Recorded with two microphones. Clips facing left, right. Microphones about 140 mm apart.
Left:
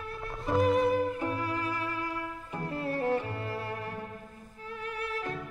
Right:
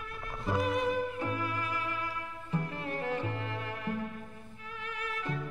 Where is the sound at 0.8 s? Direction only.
35° left (ahead or behind).